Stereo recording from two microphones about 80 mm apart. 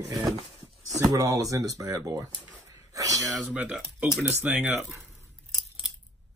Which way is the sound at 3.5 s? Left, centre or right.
Centre.